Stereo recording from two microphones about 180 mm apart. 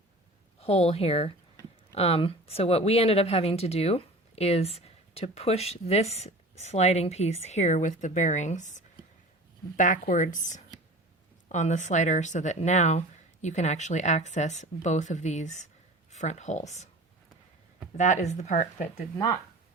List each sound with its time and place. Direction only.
0.6 s a woman's voice: 35° left (ahead or behind)
17.9 s speech: 40° left (ahead or behind)